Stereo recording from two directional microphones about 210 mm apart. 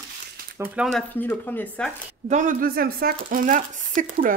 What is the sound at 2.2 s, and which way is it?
Speech, 35° right (ahead or behind).